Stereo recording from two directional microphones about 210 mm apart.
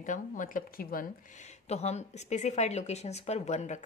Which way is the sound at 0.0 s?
40° left (ahead or behind).